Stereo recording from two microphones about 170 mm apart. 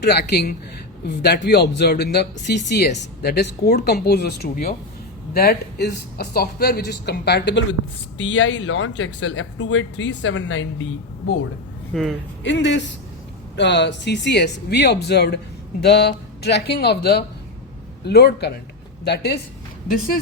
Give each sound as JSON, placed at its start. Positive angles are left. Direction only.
{"t": 0.0, "sound": "speech", "side_deg": 75}
{"t": 11.9, "sound": "speech", "side_deg": 0}
{"t": 12.4, "sound": "speech", "side_deg": 90}